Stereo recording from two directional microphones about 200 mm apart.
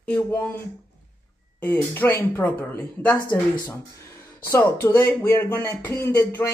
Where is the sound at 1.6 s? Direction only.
10° left (ahead or behind).